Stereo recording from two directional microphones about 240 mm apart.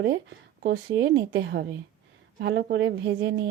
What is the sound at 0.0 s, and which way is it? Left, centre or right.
A woman's voice, right.